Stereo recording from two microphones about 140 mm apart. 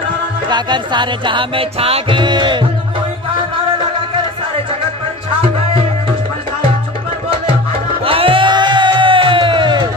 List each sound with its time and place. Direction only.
0.5 s music: 30° right (ahead or behind)
8.0 s music: 40° right (ahead or behind)